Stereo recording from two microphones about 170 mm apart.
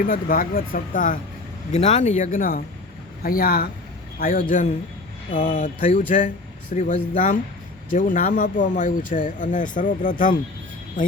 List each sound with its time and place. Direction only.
0.0 s speech: 55° left (ahead or behind)
1.7 s speech: 40° left (ahead or behind)